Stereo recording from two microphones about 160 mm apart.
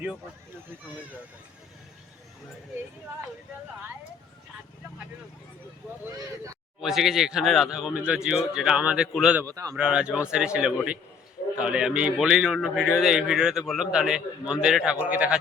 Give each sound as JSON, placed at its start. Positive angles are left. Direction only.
{"t": 6.8, "sound": "a man's voice", "side_deg": 0}
{"t": 9.4, "sound": "speech", "side_deg": -20}
{"t": 9.7, "sound": "a man's voice", "side_deg": -5}